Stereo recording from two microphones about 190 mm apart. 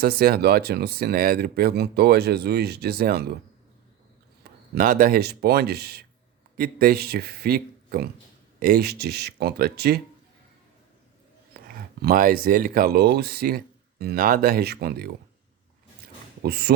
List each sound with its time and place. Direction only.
0.0 s speech: 55° right (ahead or behind)
4.7 s speech: 50° right (ahead or behind)
11.5 s speech: 50° right (ahead or behind)
16.4 s speech: 60° right (ahead or behind)